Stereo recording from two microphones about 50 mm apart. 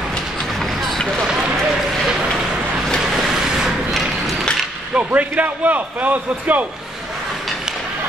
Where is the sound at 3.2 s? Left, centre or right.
Centre.